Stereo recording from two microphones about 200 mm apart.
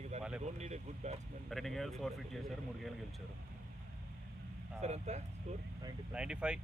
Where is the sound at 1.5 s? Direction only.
Centre (ahead or behind).